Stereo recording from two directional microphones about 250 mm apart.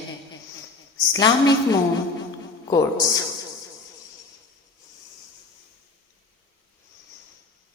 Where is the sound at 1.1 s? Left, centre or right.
Centre.